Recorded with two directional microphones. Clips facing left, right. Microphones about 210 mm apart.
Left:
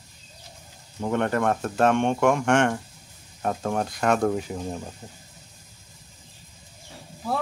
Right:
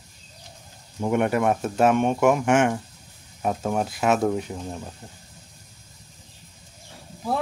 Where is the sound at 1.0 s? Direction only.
10° right (ahead or behind).